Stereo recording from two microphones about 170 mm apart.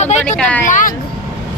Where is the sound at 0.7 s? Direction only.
50° left (ahead or behind).